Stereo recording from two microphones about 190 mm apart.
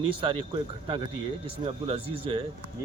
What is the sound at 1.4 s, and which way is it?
Speech, 30° right (ahead or behind).